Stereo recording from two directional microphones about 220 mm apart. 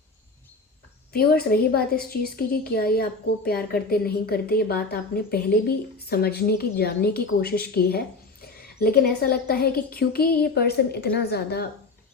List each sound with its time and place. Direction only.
1.1 s a woman's voice: 45° left (ahead or behind)